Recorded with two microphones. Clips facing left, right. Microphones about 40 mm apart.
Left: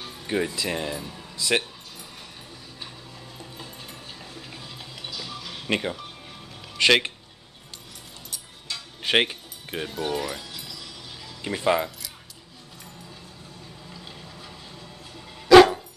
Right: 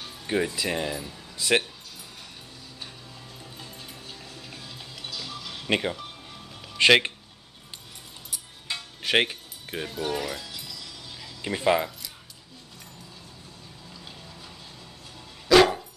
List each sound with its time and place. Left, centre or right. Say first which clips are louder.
0.3 s speech: even; centre
3.5 s music: left 1 dB; centre
5.7 s speech: right 1 dB; centre
8.7 s music: right 2 dB; right
9.0 s speech: left 1 dB; centre
10.5 s music: left 1 dB; centre
11.4 s speech: even; centre
15.4 s dog: left 5 dB; centre